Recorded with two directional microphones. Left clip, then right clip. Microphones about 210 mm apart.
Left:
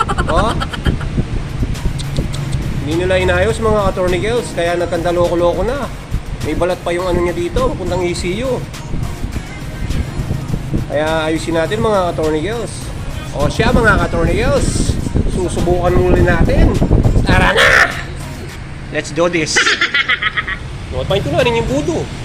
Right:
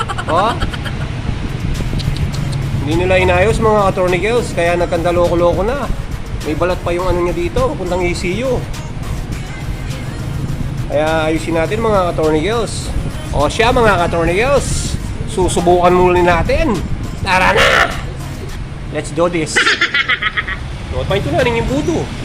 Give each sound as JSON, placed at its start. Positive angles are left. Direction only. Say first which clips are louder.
{"t": 0.0, "sound": "vehicle", "louder": "even", "side_deg": 0}
{"t": 2.9, "sound": "speech", "louder": "right 2 dB", "side_deg": 0}
{"t": 10.9, "sound": "speech", "louder": "right 1 dB", "side_deg": 5}
{"t": 12.3, "sound": "speech", "louder": "right 3 dB", "side_deg": -15}
{"t": 15.4, "sound": "speech", "louder": "right 5 dB", "side_deg": -20}
{"t": 17.2, "sound": "crow", "louder": "right 1 dB", "side_deg": -5}
{"t": 18.9, "sound": "a sound", "louder": "left 1 dB", "side_deg": 0}
{"t": 21.1, "sound": "speech", "louder": "left 1 dB", "side_deg": 5}